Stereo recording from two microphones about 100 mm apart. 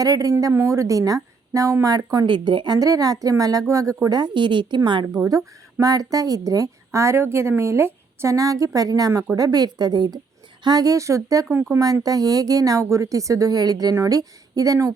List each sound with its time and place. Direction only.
0.0 s a woman's voice: 35° right (ahead or behind)
2.2 s speech: 55° right (ahead or behind)
2.7 s a woman's voice: 35° right (ahead or behind)
4.2 s a woman's voice: 50° right (ahead or behind); by 14.9 s 35° right (ahead or behind)